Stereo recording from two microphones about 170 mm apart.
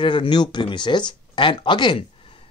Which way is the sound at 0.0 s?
30° left (ahead or behind).